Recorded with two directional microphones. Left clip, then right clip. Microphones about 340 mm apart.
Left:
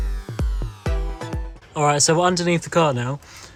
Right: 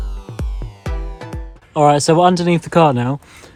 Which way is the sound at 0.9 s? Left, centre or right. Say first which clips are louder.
Even; centre.